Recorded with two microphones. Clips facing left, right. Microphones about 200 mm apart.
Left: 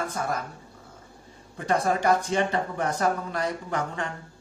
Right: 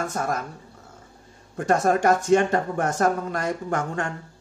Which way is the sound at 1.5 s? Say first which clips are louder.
Right 4 dB; 45° right (ahead or behind).